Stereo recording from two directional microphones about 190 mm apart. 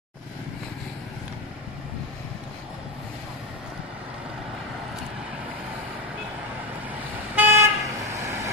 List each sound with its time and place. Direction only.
7.3 s toot: 10° right (ahead or behind)